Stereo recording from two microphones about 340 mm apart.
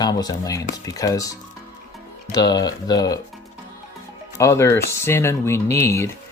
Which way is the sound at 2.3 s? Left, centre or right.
Centre.